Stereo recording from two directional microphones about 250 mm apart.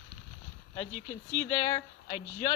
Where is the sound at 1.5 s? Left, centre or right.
Centre.